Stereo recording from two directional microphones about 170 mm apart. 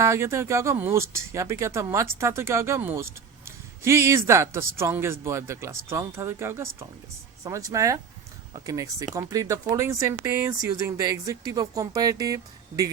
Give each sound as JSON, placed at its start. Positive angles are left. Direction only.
{"t": 0.0, "sound": "speech", "side_deg": -15}